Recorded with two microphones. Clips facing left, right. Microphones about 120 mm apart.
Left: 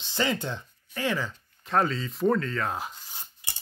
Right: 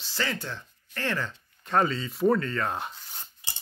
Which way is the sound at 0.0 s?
20° left (ahead or behind).